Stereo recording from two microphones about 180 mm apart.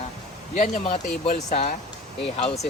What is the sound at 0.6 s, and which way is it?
Speech, 40° left (ahead or behind).